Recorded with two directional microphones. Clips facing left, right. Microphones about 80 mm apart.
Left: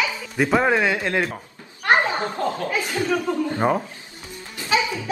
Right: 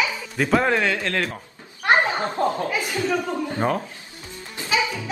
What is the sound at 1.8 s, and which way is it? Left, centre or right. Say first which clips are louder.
Children playing: even; right.